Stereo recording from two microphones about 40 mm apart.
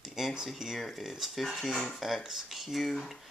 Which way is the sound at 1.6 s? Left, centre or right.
Centre.